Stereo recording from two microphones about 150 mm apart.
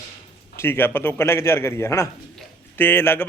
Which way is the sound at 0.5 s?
15° left (ahead or behind).